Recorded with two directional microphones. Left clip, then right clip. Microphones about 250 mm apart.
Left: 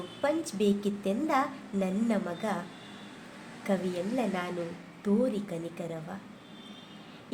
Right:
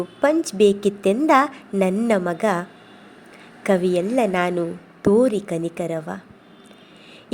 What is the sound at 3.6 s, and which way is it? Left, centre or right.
A woman's voice, right.